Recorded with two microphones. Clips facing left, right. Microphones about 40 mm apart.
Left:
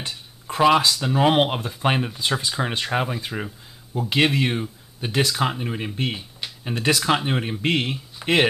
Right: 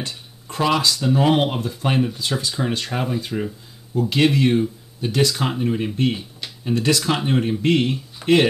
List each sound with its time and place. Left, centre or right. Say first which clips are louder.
0.5 s speech: left 3 dB; centre